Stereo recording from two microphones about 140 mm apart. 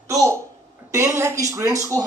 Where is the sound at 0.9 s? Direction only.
20° right (ahead or behind).